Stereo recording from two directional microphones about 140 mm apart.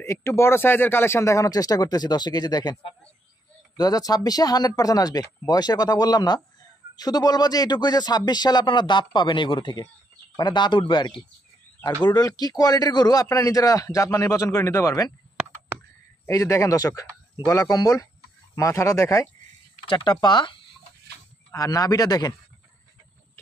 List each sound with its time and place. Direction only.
0.0 s a man's voice: 20° left (ahead or behind)
16.3 s a man's voice: 25° left (ahead or behind)
19.9 s a man's voice: 30° left (ahead or behind)